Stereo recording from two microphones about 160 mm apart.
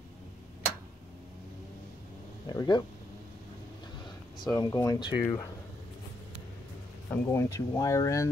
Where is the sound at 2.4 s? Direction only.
25° left (ahead or behind).